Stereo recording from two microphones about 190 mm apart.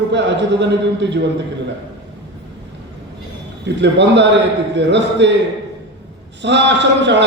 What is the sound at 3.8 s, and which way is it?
A man's voice, 65° right (ahead or behind).